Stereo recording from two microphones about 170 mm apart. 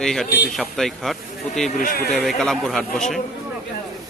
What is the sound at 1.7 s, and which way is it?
Speech, 55° left (ahead or behind).